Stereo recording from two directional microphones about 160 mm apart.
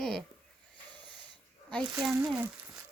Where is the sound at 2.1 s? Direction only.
10° right (ahead or behind).